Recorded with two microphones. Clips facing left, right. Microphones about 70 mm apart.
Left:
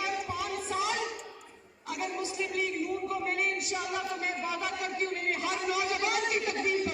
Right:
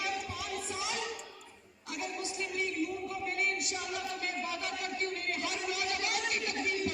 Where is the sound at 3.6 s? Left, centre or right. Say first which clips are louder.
Left 4 dB; left.